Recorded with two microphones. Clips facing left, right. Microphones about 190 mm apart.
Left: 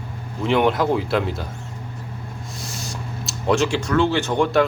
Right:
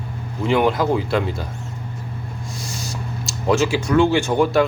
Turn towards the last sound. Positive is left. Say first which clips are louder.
# right 2 dB
turn(degrees=-10)  # may be behind; listen again after turning